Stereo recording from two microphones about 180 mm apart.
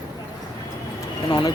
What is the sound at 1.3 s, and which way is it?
Speech, 25° left (ahead or behind).